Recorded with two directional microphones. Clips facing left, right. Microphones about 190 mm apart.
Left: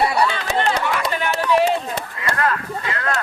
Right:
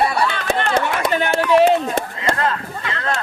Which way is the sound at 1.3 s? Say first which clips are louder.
Right 4 dB; 50° right (ahead or behind).